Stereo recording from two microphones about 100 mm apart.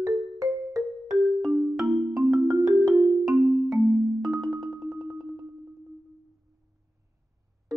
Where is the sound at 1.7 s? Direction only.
Centre (ahead or behind).